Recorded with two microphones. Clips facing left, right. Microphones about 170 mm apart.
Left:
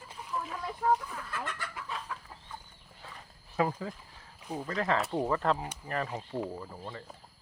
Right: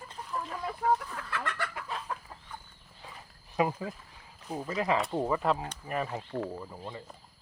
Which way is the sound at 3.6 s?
15° right (ahead or behind).